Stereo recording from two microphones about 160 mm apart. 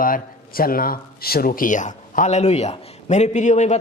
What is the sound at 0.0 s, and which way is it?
A woman's voice, 65° left (ahead or behind).